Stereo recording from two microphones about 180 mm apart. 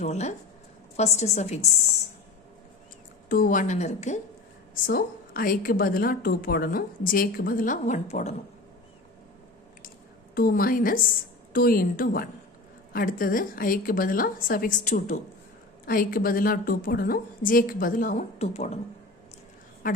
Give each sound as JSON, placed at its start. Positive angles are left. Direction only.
{"t": 0.0, "sound": "a woman's voice", "side_deg": 40}
{"t": 3.2, "sound": "a woman's voice", "side_deg": 50}
{"t": 4.7, "sound": "a woman's voice", "side_deg": 55}
{"t": 10.3, "sound": "a woman's voice", "side_deg": 55}
{"t": 19.8, "sound": "a woman's voice", "side_deg": 50}